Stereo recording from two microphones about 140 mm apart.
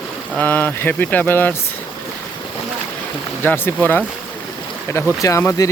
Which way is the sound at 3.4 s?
15° left (ahead or behind).